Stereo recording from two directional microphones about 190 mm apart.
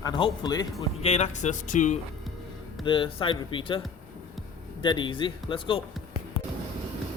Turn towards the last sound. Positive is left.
turn(degrees=30)  # may be behind; listen again after turning